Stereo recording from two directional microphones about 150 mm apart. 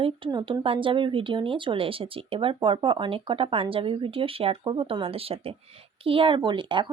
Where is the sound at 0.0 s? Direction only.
30° right (ahead or behind).